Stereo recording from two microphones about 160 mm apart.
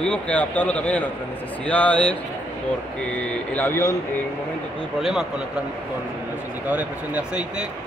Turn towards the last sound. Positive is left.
turn(degrees=-10)  # may be behind; listen again after turning